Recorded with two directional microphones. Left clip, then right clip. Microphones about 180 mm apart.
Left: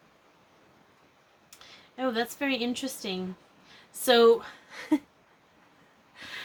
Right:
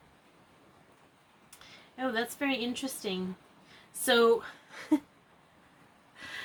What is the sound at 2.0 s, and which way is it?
Speech, 30° left (ahead or behind).